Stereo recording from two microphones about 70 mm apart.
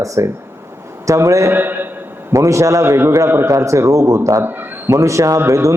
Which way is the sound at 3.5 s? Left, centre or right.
Right.